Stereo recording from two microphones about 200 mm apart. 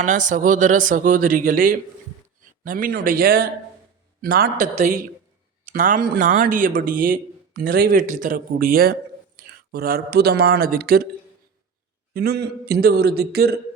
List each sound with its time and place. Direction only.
0.0 s speech: 40° right (ahead or behind)
12.1 s speech: 50° right (ahead or behind)